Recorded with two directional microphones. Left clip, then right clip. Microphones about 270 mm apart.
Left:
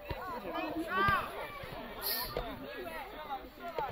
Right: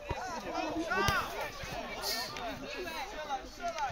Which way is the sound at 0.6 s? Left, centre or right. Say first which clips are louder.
Right 1 dB; left.